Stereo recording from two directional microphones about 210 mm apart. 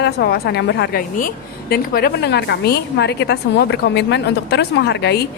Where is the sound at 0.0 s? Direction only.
50° left (ahead or behind).